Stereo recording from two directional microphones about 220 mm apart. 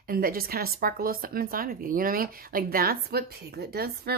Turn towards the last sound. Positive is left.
turn(degrees=-45)  # may be behind; listen again after turning